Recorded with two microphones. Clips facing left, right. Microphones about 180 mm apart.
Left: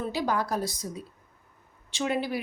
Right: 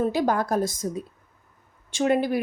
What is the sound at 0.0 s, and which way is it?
A woman's voice, 50° right (ahead or behind).